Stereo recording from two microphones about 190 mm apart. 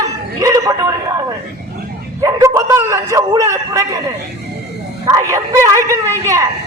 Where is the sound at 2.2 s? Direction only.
15° right (ahead or behind).